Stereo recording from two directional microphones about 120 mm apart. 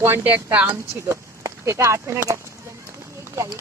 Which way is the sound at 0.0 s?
20° right (ahead or behind).